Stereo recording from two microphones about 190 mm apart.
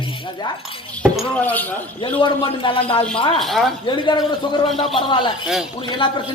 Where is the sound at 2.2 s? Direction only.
25° left (ahead or behind).